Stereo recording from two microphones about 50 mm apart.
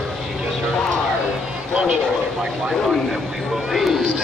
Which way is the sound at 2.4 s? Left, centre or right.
Centre.